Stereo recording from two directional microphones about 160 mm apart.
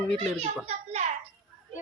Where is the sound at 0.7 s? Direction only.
40° right (ahead or behind).